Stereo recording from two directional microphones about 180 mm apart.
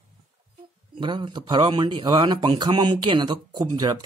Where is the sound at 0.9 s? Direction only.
25° right (ahead or behind).